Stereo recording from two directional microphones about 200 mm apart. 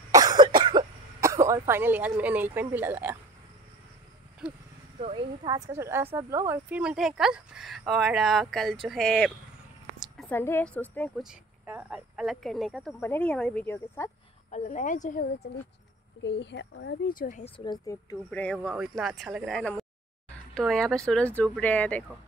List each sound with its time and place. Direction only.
0.1 s cough: 20° right (ahead or behind)
4.4 s speech: 5° right (ahead or behind)
4.9 s a woman's voice: 25° right (ahead or behind); by 11.2 s 5° left (ahead or behind)
11.2 s speech: 5° right (ahead or behind); by 14.1 s 10° left (ahead or behind)
14.5 s speech: 35° left (ahead or behind)
16.2 s speech: 60° left (ahead or behind); by 17.5 s 40° left (ahead or behind)
17.6 s speech: 20° left (ahead or behind)
18.3 s speech: 5° left (ahead or behind)